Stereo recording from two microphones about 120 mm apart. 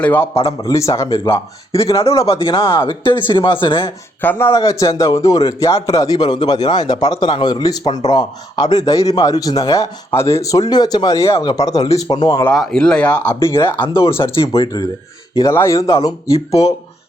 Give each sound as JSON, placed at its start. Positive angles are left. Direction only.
{"t": 0.0, "sound": "speech", "side_deg": 15}
{"t": 0.3, "sound": "a man's voice", "side_deg": 55}
{"t": 0.7, "sound": "speech", "side_deg": 25}
{"t": 1.2, "sound": "speech", "side_deg": 50}
{"t": 4.2, "sound": "a man's voice", "side_deg": 15}
{"t": 12.5, "sound": "speech", "side_deg": 5}
{"t": 13.4, "sound": "speech", "side_deg": 25}
{"t": 14.2, "sound": "speech", "side_deg": 50}
{"t": 15.4, "sound": "speech", "side_deg": 25}